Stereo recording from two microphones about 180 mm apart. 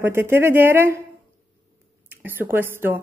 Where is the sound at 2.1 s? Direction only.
10° right (ahead or behind).